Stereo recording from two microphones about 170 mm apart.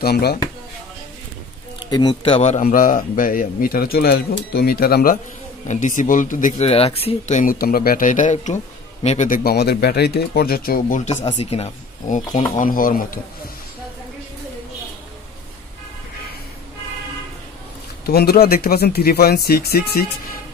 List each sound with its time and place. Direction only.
0.0 s speech: 70° left (ahead or behind)
1.8 s speech: 25° left (ahead or behind)
2.6 s a man's voice: 55° left (ahead or behind)
5.7 s speech: 45° left (ahead or behind)
6.7 s speech: 35° left (ahead or behind)
9.4 s speech: 70° left (ahead or behind)
11.1 s speech: 40° left (ahead or behind)
12.4 s speech: 50° left (ahead or behind)
18.0 s a man's voice: 65° left (ahead or behind)